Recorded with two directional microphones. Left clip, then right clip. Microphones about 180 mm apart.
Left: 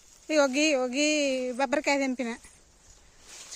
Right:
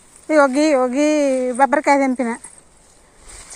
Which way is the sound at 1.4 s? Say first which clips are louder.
Right 12 dB; 15° left (ahead or behind).